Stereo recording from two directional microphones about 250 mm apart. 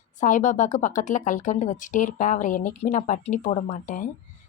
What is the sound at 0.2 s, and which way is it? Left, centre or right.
A woman's voice, left.